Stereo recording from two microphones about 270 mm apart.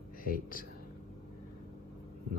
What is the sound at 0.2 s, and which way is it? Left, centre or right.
Speech, left.